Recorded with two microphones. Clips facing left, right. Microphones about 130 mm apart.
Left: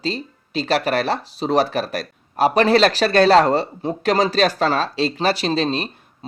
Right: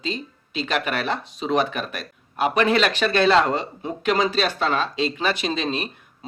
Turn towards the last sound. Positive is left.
turn(degrees=30)  # may be behind; listen again after turning